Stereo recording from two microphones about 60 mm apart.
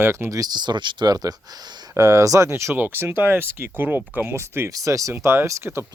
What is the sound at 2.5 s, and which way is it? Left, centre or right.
Speech, right.